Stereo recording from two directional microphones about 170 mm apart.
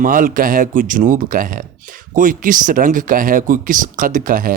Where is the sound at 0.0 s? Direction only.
55° right (ahead or behind).